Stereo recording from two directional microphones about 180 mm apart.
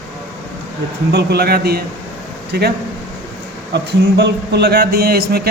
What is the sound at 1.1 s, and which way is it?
Speech, 65° right (ahead or behind).